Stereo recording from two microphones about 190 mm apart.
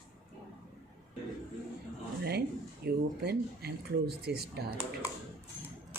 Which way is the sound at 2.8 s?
60° right (ahead or behind).